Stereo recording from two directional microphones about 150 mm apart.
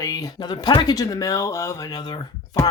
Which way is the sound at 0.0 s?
25° left (ahead or behind).